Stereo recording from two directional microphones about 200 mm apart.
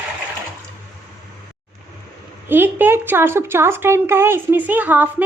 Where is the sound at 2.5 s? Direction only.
10° right (ahead or behind).